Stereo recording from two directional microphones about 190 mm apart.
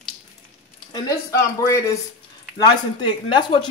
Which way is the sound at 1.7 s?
15° left (ahead or behind).